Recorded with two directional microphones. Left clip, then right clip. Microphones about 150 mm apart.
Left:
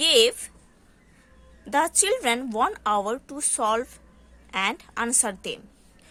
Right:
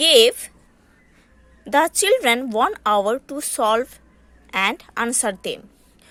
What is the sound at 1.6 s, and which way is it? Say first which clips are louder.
A woman's voice: right 5 dB; 35° right (ahead or behind).